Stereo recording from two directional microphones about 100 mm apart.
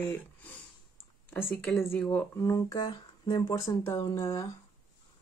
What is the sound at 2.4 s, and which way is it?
Speech, 35° left (ahead or behind).